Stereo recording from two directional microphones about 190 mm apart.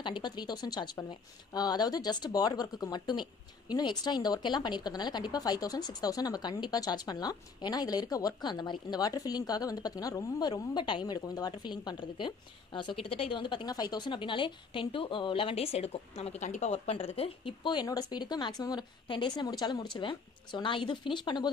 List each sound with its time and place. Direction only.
0.0 s a woman's voice: 25° left (ahead or behind)